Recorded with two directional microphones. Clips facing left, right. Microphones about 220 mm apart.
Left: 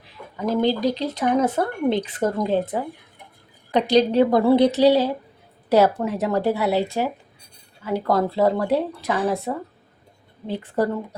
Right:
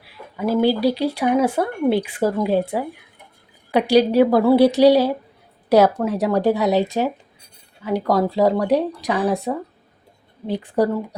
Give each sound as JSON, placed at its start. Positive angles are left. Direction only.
{"t": 0.0, "sound": "a woman's voice", "side_deg": -10}